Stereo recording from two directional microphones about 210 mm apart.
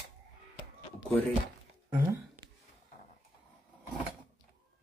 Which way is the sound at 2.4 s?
20° right (ahead or behind).